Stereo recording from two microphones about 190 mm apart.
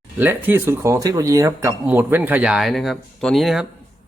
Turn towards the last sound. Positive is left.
turn(degrees=0)  # may be behind; listen again after turning